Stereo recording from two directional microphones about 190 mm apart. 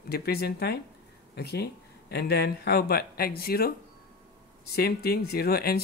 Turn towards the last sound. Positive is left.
turn(degrees=55)  # may be behind; listen again after turning